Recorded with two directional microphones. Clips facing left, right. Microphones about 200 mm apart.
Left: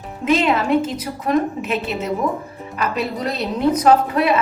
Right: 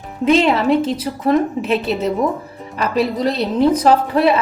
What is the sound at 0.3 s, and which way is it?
A woman's voice, 30° right (ahead or behind).